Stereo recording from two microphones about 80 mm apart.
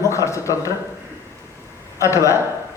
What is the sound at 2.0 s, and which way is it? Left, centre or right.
Speech, left.